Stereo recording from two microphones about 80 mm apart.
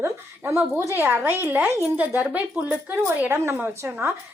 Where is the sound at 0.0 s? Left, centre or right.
Right.